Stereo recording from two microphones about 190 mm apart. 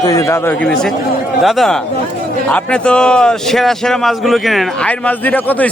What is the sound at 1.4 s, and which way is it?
A man's voice, centre (ahead or behind).